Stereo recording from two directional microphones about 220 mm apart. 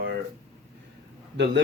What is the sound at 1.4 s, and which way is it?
Speech, 55° right (ahead or behind).